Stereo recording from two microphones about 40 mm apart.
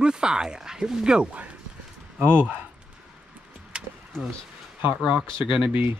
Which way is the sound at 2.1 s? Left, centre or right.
Right.